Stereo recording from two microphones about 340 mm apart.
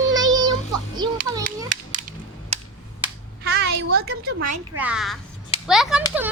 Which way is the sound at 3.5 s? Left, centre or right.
Right.